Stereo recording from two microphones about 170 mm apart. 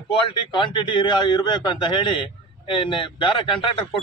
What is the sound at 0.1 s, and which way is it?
Speech, 30° left (ahead or behind).